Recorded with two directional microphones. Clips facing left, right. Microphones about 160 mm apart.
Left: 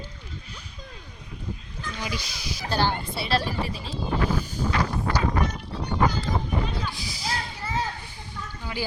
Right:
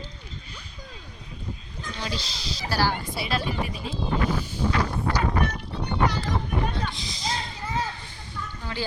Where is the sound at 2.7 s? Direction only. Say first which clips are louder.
Even; 20° left (ahead or behind).